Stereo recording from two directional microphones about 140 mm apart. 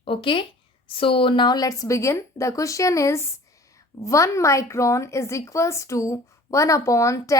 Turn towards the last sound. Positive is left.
turn(degrees=20)  # may be behind; listen again after turning